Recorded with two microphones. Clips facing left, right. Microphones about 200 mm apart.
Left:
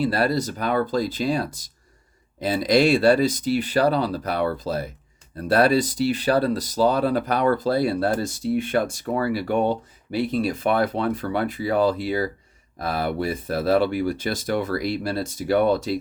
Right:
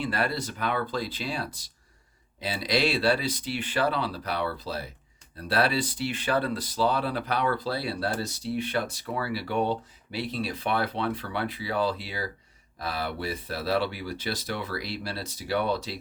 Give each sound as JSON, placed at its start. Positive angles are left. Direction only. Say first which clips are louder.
{"t": 0.0, "sound": "speech", "louder": "left 7 dB", "side_deg": 40}